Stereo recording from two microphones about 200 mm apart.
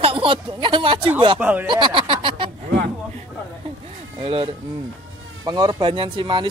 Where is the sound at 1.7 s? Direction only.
25° right (ahead or behind).